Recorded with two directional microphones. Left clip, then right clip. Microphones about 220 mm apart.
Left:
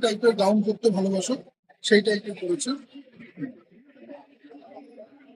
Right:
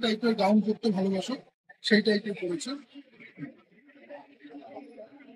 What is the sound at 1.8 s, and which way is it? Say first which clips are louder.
Speech: left 4 dB; 40° left (ahead or behind).